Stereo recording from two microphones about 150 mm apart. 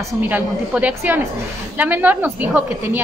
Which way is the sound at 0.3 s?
10° right (ahead or behind).